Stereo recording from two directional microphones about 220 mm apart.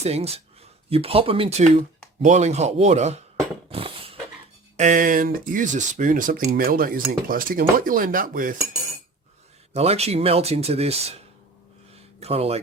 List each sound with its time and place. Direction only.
0.0 s speech: 30° right (ahead or behind)
3.7 s a sound: 25° right (ahead or behind)
4.8 s speech: 35° right (ahead or behind)
9.7 s speech: 30° right (ahead or behind)
12.2 s speech: 25° right (ahead or behind)